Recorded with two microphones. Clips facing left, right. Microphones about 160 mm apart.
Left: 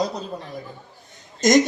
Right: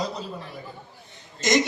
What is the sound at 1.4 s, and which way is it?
Speech, 45° left (ahead or behind).